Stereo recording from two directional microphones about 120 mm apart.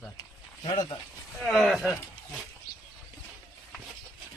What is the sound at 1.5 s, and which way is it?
Speech, centre (ahead or behind).